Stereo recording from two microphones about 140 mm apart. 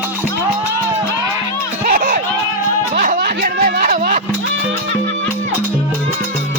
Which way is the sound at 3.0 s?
80° right.